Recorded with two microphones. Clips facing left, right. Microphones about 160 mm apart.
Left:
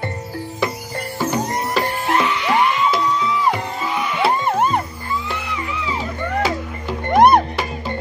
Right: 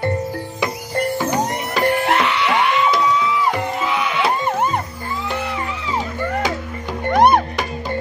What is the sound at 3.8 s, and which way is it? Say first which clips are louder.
Music: right 2 dB; 90° right.